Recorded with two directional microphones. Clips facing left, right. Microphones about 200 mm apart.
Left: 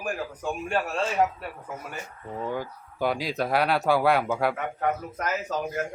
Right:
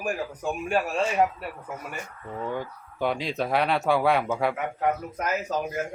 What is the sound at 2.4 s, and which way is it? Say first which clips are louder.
Speech: even; 5° left (ahead or behind).